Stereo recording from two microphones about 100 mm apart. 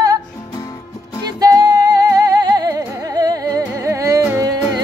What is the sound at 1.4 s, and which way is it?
Music, 40° right (ahead or behind).